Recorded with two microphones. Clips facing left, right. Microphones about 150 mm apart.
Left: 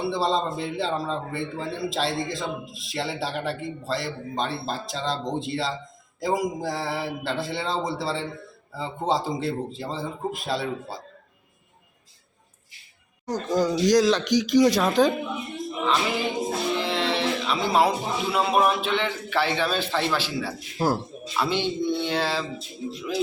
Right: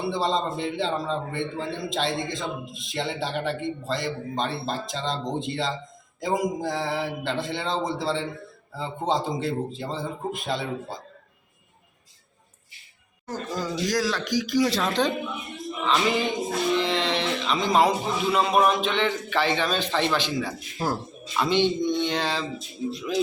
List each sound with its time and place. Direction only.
0.0 s a man's voice: centre (ahead or behind)
13.2 s speech: 20° left (ahead or behind)